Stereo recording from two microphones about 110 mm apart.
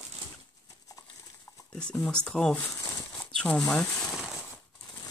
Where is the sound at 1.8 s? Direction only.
10° left (ahead or behind).